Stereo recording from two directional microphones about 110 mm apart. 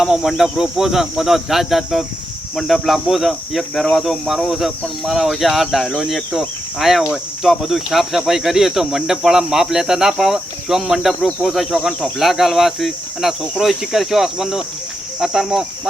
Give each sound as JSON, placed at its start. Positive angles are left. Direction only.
{"t": 0.0, "sound": "speech", "side_deg": -5}